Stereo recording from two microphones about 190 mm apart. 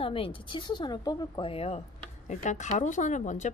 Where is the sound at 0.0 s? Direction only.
30° left (ahead or behind).